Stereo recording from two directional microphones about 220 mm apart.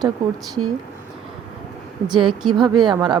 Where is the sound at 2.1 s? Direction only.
20° right (ahead or behind).